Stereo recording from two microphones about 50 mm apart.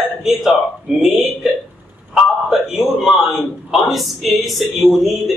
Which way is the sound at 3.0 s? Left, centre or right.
Centre.